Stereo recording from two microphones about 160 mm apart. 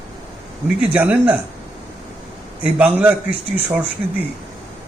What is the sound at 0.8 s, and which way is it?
Speech, 10° right (ahead or behind).